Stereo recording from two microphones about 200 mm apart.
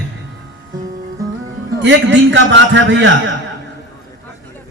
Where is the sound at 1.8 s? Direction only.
65° right (ahead or behind).